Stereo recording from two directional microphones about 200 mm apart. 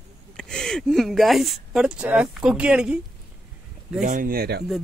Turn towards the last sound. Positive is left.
turn(degrees=-50)  # may be behind; listen again after turning